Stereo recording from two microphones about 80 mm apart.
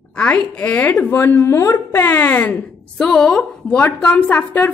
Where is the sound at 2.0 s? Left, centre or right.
Left.